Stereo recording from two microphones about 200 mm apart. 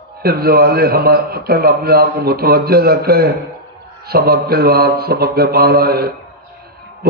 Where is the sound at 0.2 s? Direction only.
50° right (ahead or behind).